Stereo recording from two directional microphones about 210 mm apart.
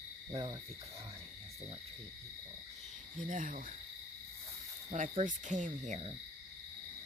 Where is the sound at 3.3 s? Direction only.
40° right (ahead or behind).